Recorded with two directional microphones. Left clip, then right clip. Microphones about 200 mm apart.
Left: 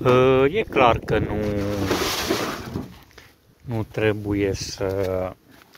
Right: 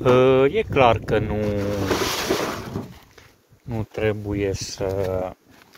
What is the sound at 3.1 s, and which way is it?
Speech, 5° left (ahead or behind).